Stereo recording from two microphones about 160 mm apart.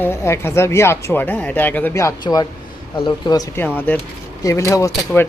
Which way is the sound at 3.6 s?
10° left (ahead or behind).